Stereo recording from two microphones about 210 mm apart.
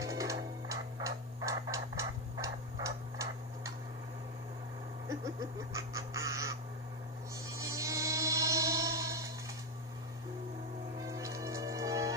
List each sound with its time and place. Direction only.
0.0 s music: 15° right (ahead or behind)
5.0 s a sound: 15° right (ahead or behind)
7.3 s music: 15° right (ahead or behind)
11.0 s music: 15° right (ahead or behind)